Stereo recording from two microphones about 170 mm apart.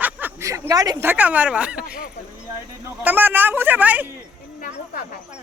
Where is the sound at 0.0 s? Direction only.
15° right (ahead or behind).